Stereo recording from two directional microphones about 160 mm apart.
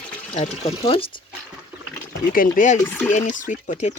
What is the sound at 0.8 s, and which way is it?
Speech, 35° left (ahead or behind).